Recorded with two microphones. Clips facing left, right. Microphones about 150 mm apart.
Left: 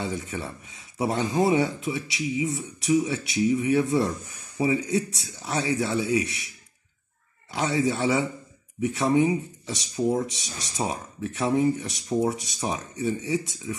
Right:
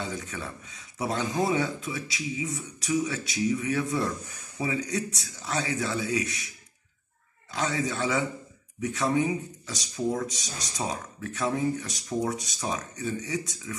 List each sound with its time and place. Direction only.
0.0 s speech: 25° left (ahead or behind)
7.6 s speech: 25° left (ahead or behind)